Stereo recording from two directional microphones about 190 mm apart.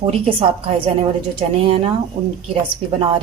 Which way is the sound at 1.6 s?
30° right (ahead or behind).